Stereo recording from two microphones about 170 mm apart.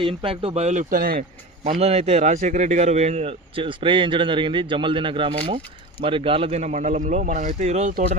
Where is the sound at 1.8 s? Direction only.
35° right (ahead or behind).